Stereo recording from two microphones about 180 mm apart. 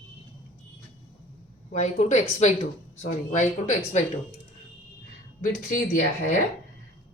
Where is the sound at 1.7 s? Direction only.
40° left (ahead or behind).